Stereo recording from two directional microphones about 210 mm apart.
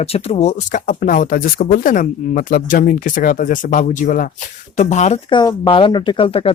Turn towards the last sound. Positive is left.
turn(degrees=25)  # may be behind; listen again after turning